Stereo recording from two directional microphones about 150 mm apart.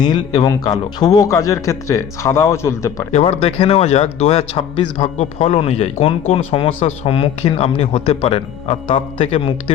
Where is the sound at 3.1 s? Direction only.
45° left (ahead or behind).